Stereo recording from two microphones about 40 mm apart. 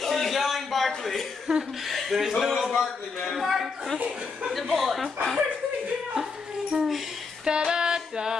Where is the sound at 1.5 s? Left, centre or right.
Centre.